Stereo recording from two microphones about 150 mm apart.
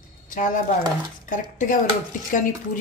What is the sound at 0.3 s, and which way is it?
A woman's voice, 55° left (ahead or behind).